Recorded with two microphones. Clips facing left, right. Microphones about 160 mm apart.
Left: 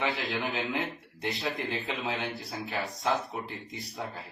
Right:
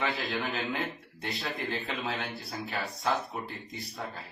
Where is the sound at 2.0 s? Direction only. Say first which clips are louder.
Left 2 dB; centre (ahead or behind).